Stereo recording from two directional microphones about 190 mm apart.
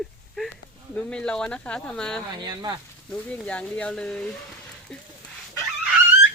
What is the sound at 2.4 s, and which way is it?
Speech, 20° right (ahead or behind).